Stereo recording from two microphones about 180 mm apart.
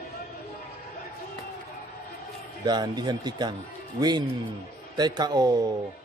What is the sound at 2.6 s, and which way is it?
Speech, 25° right (ahead or behind).